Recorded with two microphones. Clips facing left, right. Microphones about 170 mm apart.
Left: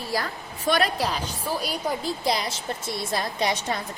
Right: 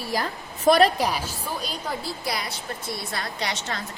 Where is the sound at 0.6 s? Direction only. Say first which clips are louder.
Right 6 dB; 35° right (ahead or behind).